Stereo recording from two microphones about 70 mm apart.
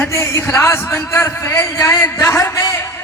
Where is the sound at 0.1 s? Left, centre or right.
Left.